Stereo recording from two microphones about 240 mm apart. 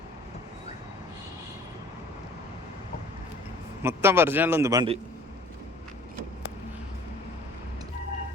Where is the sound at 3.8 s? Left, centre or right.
Centre.